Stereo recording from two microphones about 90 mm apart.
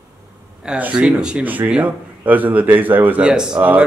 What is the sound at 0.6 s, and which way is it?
Speech, 10° right (ahead or behind).